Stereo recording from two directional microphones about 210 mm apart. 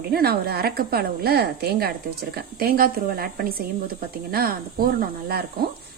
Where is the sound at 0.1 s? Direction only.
50° right (ahead or behind).